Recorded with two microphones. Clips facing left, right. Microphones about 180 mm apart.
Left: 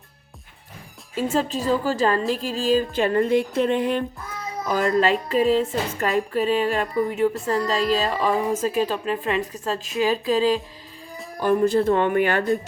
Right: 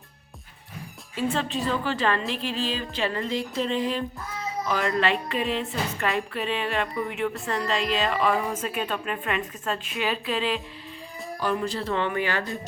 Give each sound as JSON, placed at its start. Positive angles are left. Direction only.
{"t": 1.1, "sound": "music", "side_deg": 40}
{"t": 4.7, "sound": "music", "side_deg": 40}